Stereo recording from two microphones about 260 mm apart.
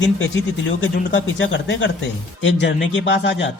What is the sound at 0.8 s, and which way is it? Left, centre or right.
A man's voice, left.